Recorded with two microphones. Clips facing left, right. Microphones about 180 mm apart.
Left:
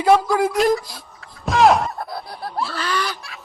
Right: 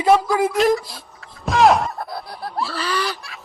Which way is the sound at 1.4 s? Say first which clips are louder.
Even; centre (ahead or behind).